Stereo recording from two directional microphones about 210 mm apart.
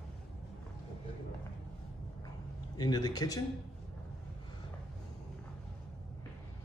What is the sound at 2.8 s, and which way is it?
Speech, 20° left (ahead or behind).